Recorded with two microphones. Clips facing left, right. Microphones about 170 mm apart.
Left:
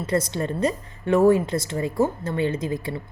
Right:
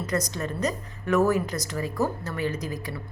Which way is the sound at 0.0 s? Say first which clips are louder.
Left 4 dB; 30° left (ahead or behind).